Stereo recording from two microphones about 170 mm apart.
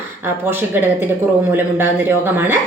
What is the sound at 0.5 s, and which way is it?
A woman's voice, 10° right (ahead or behind).